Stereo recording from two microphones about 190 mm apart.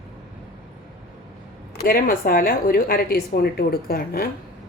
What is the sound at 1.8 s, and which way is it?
A woman's voice, 50° left (ahead or behind).